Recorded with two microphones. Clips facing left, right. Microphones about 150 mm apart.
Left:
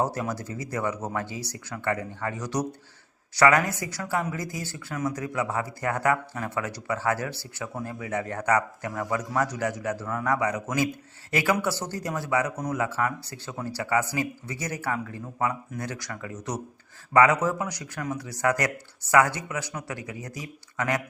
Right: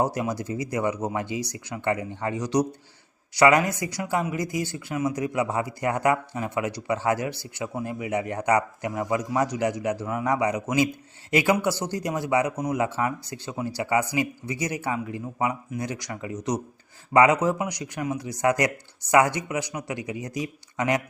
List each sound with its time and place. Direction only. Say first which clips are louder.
0.0 s speech: right 2 dB; 15° right (ahead or behind)